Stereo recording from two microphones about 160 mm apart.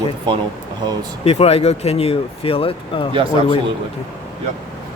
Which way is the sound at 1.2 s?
40° left (ahead or behind).